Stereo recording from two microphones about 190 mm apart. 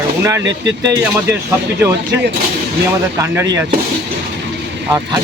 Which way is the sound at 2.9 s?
15° right (ahead or behind).